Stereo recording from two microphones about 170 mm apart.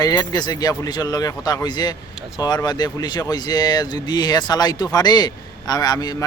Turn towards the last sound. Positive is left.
turn(degrees=20)  # may be behind; listen again after turning